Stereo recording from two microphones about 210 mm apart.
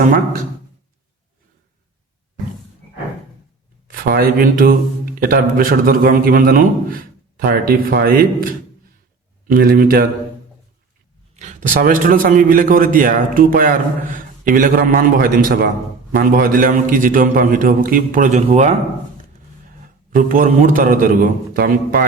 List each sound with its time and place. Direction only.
3.8 s a man's voice: 45° right (ahead or behind)
11.3 s a man's voice: 35° right (ahead or behind)
20.1 s a man's voice: 40° right (ahead or behind)